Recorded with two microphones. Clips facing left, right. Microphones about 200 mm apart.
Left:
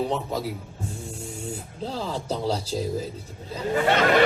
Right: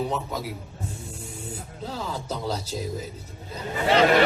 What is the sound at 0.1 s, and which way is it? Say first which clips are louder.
A man's voice: left 3 dB; 30° left (ahead or behind).